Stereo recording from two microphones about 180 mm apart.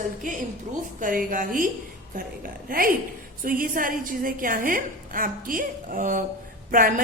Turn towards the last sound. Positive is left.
turn(degrees=-50)  # may be behind; listen again after turning